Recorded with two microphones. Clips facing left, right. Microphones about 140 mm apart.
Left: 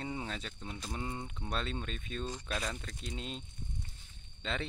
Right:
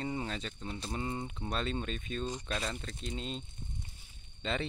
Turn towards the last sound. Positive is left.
turn(degrees=0)  # may be behind; listen again after turning